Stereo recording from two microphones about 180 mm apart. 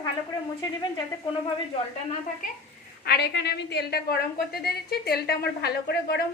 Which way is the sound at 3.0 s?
65° left (ahead or behind).